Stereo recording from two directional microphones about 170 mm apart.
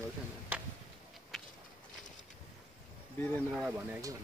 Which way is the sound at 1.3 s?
Centre (ahead or behind).